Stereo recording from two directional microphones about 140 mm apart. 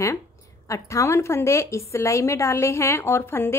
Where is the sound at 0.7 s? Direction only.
20° left (ahead or behind).